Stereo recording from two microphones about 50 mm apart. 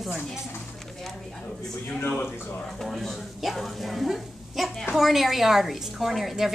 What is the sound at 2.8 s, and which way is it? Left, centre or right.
A woman's voice, centre.